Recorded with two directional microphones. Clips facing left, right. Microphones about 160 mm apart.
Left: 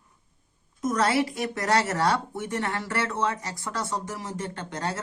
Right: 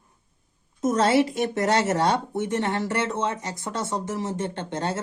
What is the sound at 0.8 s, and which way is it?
Speech, 25° right (ahead or behind).